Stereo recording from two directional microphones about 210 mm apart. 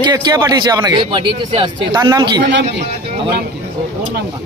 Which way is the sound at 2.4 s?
55° right (ahead or behind).